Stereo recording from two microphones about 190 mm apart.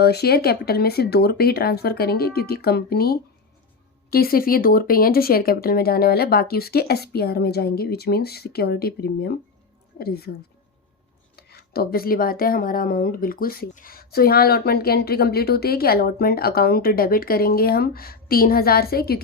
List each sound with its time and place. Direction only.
0.0 s speech: 55° left (ahead or behind)
11.3 s speech: 55° left (ahead or behind)